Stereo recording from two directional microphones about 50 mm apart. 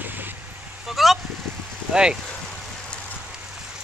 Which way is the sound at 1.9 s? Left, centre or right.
Centre.